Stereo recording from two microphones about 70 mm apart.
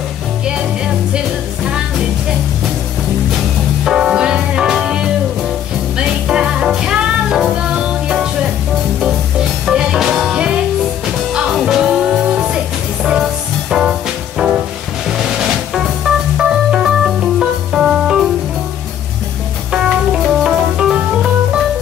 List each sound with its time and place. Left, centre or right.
1.1 s music: centre
3.8 s music: centre
9.7 s music: centre
10.3 s music: centre
11.6 s music: centre
13.7 s music: centre
19.7 s music: centre